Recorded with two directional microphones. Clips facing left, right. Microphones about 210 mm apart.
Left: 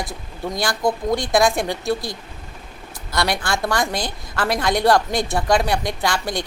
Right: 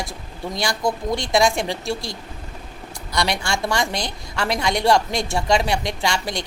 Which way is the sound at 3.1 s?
Centre (ahead or behind).